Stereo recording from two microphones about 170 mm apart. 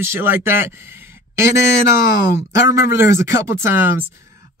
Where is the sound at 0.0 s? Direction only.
10° right (ahead or behind).